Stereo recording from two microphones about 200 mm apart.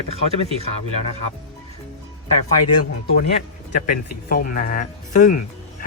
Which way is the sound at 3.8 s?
45° left (ahead or behind).